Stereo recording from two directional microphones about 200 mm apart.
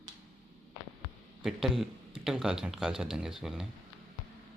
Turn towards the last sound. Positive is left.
turn(degrees=0)  # may be behind; listen again after turning